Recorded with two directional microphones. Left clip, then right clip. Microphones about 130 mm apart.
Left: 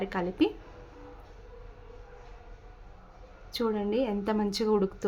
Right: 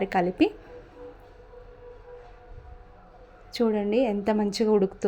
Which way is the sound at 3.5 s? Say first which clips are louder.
Right 5 dB; 25° right (ahead or behind).